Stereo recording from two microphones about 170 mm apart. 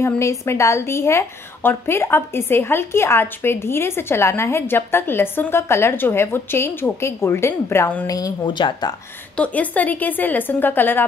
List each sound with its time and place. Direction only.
0.0 s a woman's voice: 15° left (ahead or behind)
8.1 s speech: 25° left (ahead or behind)
9.4 s a woman's voice: 10° left (ahead or behind)